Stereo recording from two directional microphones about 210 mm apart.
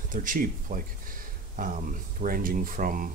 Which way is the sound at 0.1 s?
40° right (ahead or behind).